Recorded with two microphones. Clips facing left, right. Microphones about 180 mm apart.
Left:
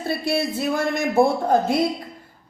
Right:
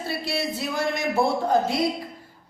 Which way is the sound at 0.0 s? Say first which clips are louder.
Left 5 dB; 50° left (ahead or behind).